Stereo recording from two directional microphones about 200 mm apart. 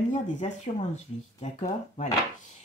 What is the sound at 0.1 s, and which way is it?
Speech, 35° left (ahead or behind).